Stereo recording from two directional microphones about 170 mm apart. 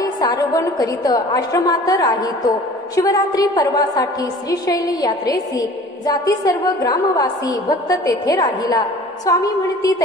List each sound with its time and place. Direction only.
0.0 s a woman's voice: 20° left (ahead or behind)